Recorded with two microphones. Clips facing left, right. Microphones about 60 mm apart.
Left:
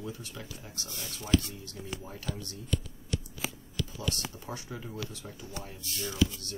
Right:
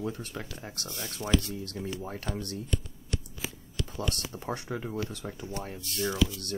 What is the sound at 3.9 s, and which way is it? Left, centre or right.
Speech, right.